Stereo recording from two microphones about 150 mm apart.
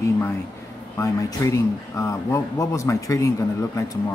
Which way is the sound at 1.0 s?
20° left (ahead or behind).